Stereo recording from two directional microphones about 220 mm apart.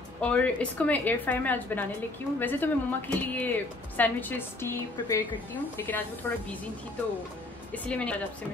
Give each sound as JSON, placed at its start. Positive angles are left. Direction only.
{"t": 0.2, "sound": "speech", "side_deg": 5}
{"t": 7.7, "sound": "a woman's voice", "side_deg": 5}